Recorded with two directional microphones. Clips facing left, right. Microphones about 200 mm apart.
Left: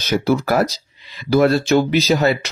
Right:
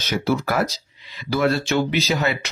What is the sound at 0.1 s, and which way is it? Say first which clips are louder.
Speech: left 5 dB; 40° left (ahead or behind).